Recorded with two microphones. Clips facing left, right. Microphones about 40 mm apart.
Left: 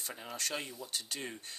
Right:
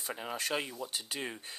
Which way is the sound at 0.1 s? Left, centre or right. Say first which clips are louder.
Right 5 dB; centre.